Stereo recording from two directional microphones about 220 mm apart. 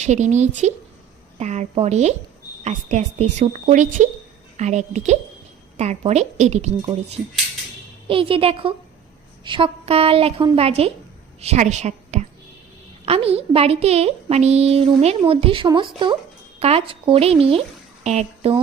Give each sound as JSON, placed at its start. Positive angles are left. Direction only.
{"t": 0.0, "sound": "a woman's voice", "side_deg": -30}